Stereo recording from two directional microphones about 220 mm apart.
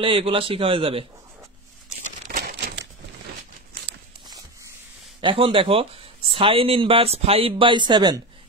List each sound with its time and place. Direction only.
0.0 s speech: 25° right (ahead or behind)
2.2 s crumpling: 35° right (ahead or behind)
2.5 s a sound: 55° right (ahead or behind)
5.2 s speech: 25° right (ahead or behind)